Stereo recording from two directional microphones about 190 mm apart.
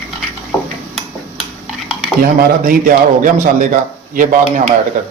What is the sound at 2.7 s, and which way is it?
Speech, 45° right (ahead or behind).